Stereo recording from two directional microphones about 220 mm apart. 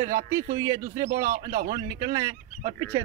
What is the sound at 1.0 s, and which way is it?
Speech, 35° right (ahead or behind).